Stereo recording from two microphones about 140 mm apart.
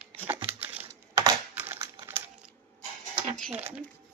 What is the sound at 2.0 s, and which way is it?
Crumpling, 15° right (ahead or behind).